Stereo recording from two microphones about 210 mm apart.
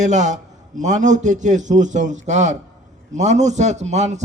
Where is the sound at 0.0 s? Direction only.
35° right (ahead or behind).